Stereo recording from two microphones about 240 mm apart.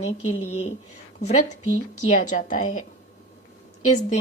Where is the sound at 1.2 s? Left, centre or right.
Left.